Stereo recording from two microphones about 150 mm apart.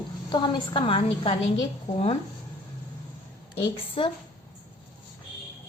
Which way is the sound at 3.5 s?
30° left (ahead or behind).